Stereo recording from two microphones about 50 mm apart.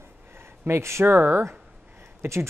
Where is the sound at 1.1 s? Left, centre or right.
Right.